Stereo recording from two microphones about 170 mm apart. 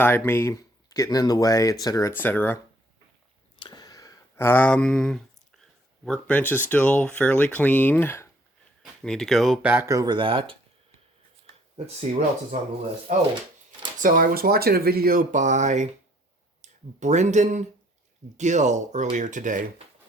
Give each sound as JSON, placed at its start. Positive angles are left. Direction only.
{"t": 0.0, "sound": "speech", "side_deg": 15}
{"t": 3.6, "sound": "a sound", "side_deg": 25}
{"t": 6.1, "sound": "speech", "side_deg": 5}
{"t": 8.8, "sound": "speech", "side_deg": 0}
{"t": 13.1, "sound": "speech", "side_deg": -50}